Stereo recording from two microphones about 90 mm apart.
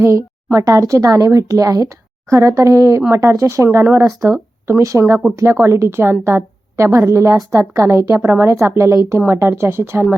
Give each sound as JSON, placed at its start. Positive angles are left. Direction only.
{"t": 0.5, "sound": "a woman's voice", "side_deg": -35}